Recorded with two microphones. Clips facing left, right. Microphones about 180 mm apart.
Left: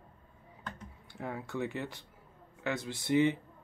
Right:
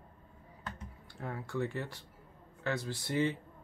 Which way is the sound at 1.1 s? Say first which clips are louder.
Left 2 dB; 15° left (ahead or behind).